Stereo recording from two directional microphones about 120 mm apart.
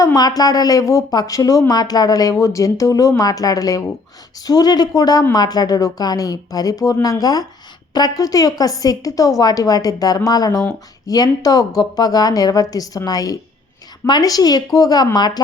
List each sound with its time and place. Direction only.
0.0 s a woman's voice: 30° left (ahead or behind)